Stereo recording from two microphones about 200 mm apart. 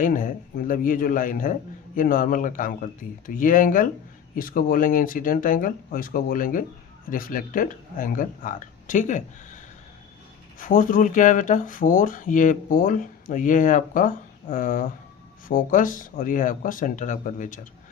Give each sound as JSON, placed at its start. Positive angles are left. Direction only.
{"t": 0.0, "sound": "speech", "side_deg": 40}
{"t": 10.6, "sound": "speech", "side_deg": 40}